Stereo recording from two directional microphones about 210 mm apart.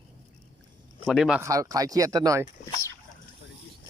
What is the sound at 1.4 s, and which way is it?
Speech, 15° right (ahead or behind).